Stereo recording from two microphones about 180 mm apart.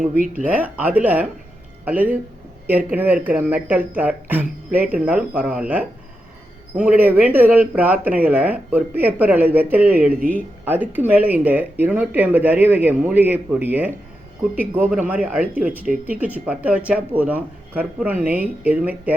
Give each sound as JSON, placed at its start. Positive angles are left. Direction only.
{"t": 0.0, "sound": "speech", "side_deg": -50}
{"t": 0.4, "sound": "speech", "side_deg": -10}